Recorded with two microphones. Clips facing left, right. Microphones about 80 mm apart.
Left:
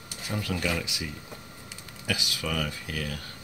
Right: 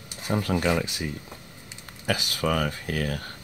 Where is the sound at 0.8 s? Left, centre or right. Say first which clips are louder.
Right 5 dB; right.